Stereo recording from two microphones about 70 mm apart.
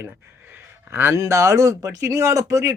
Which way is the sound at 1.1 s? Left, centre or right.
Right.